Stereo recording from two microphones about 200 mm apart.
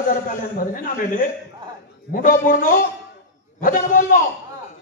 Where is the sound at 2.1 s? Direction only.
45° left (ahead or behind).